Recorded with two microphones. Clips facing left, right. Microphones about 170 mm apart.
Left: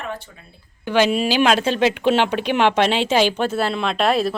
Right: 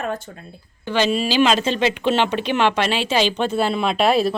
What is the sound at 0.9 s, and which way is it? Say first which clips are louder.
Speech: left 2 dB; 10° left (ahead or behind).